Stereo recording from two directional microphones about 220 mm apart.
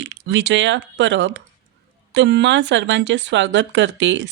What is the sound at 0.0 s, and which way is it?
Speech, 55° right (ahead or behind).